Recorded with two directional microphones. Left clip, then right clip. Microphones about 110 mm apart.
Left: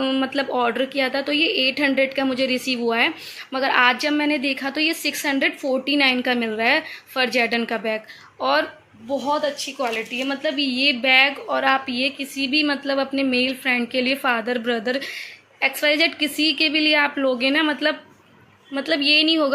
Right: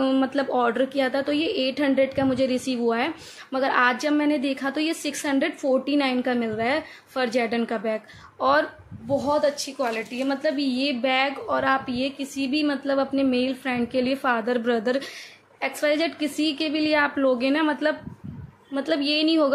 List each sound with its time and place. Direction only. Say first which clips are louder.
0.0 s a woman's voice: left 1 dB; 15° right (ahead or behind)
9.8 s a woman's voice: left 2 dB; centre (ahead or behind)
14.4 s speech: even; 25° right (ahead or behind)
15.6 s a woman's voice: left 5 dB; 10° right (ahead or behind)